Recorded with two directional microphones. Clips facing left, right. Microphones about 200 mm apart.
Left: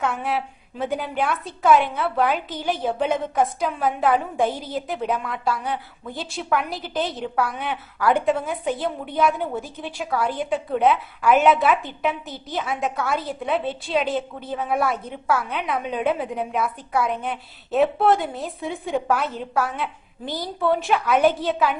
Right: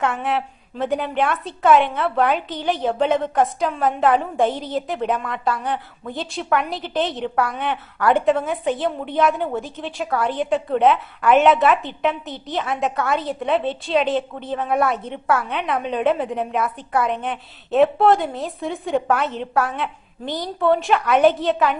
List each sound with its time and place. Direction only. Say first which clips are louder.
0.0 s a woman's voice: right 2 dB; centre (ahead or behind)
4.4 s a woman's voice: right 3 dB; 20° right (ahead or behind)
4.7 s a woman's voice: right 3 dB; 5° left (ahead or behind)
20.2 s a woman's voice: right 3 dB; 20° right (ahead or behind)
20.8 s a woman's voice: right 2 dB; centre (ahead or behind)